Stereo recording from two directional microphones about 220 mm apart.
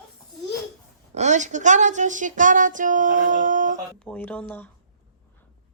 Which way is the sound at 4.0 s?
5° left (ahead or behind).